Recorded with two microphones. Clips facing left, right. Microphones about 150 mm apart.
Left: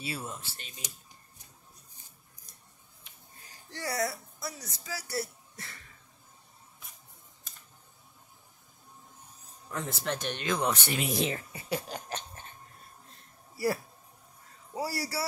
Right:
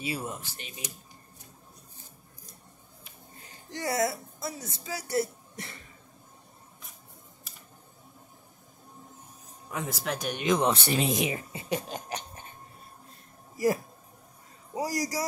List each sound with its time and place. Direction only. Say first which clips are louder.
0.0 s speech: right 4 dB; 15° right (ahead or behind)
3.7 s a woman's voice: right 4 dB; 20° right (ahead or behind)
9.7 s speech: right 1 dB; 10° right (ahead or behind); by 11.1 s 30° right (ahead or behind)
11.1 s speech: right 1 dB; 15° right (ahead or behind)
14.7 s speech: right 3 dB; 15° right (ahead or behind)